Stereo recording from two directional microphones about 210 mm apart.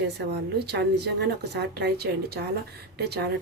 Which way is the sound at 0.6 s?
50° right (ahead or behind).